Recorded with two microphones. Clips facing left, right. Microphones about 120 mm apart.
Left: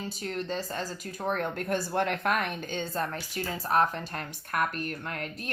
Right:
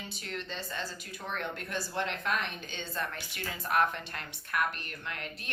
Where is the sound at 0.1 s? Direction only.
40° left (ahead or behind).